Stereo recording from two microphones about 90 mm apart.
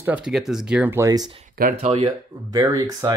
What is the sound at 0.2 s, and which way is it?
Speech, 5° right (ahead or behind).